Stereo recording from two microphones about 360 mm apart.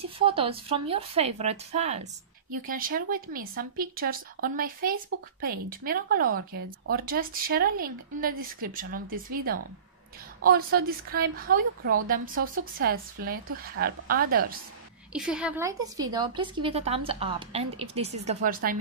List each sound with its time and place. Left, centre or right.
0.0 s speech: centre
15.1 s speech: centre; by 18.8 s right